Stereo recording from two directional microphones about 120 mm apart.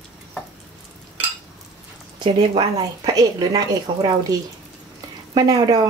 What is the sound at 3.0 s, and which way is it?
Speech, 30° right (ahead or behind).